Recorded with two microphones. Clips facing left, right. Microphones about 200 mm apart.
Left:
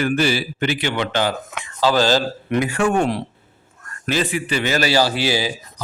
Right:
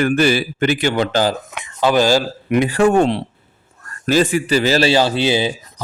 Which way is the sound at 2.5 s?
30° right (ahead or behind).